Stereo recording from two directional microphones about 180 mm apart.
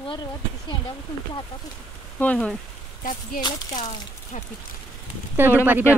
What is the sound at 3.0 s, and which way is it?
Speech, 50° left (ahead or behind).